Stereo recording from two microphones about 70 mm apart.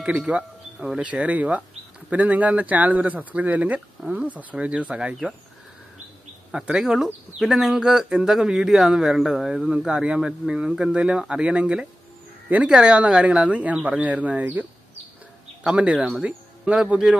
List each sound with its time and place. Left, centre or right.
0.0 s speech: centre
6.5 s speech: centre
15.6 s speech: centre